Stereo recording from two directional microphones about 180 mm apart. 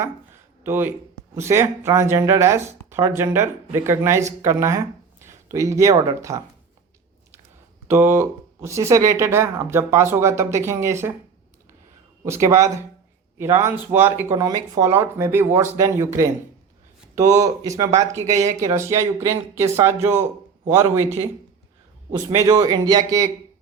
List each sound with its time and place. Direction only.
0.6 s speech: 10° right (ahead or behind)
5.2 s a sound: 15° right (ahead or behind)
6.1 s speech: 15° right (ahead or behind)
7.9 s speech: 15° right (ahead or behind)
12.2 s a man's voice: 15° right (ahead or behind)
18.1 s speech: 40° right (ahead or behind)
18.6 s speech: 15° right (ahead or behind)
22.1 s a man's voice: 20° right (ahead or behind)